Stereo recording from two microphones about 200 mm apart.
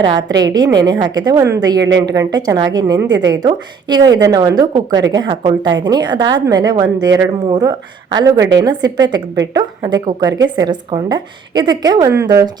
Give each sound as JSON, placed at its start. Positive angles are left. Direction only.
{"t": 0.0, "sound": "a woman's voice", "side_deg": -20}